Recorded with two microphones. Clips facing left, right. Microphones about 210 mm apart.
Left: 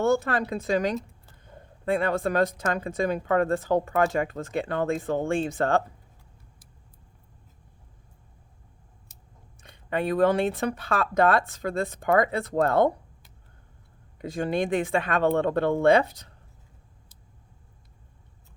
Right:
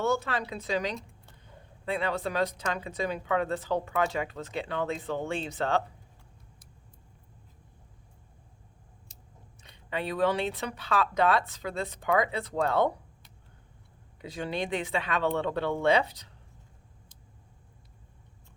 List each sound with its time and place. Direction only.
0.0 s speech: 50° left (ahead or behind)
9.6 s speech: 50° left (ahead or behind)
14.2 s speech: 50° left (ahead or behind)